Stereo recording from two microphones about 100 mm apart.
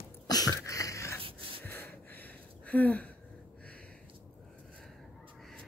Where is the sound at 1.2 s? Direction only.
60° right (ahead or behind).